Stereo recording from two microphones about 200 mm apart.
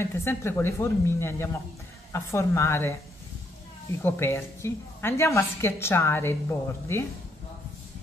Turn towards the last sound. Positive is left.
turn(degrees=10)  # may be behind; listen again after turning